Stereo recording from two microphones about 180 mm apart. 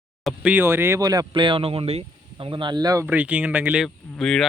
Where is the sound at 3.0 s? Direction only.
10° right (ahead or behind).